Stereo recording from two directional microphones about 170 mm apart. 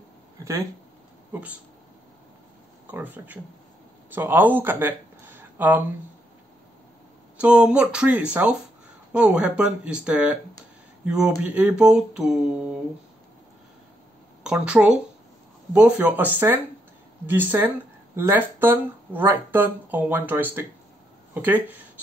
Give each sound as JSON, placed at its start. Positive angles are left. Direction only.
{"t": 0.4, "sound": "a sound", "side_deg": -20}
{"t": 1.3, "sound": "speech", "side_deg": -10}
{"t": 2.9, "sound": "speech", "side_deg": -10}
{"t": 7.3, "sound": "speech", "side_deg": -5}
{"t": 11.1, "sound": "a sound", "side_deg": -5}
{"t": 14.4, "sound": "speech", "side_deg": -5}